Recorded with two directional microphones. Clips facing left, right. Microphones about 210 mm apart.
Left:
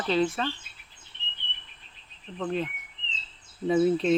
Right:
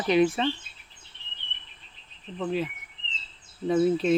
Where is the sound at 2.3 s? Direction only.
5° right (ahead or behind).